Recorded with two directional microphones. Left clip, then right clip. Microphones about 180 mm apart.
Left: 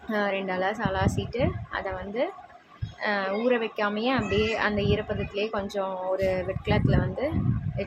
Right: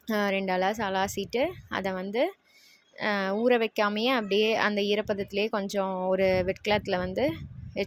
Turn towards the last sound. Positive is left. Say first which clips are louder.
# right 1 dB
turn(degrees=-50)  # may be behind; listen again after turning